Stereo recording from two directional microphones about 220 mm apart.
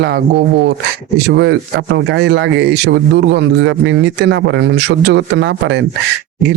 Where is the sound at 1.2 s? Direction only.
50° right (ahead or behind).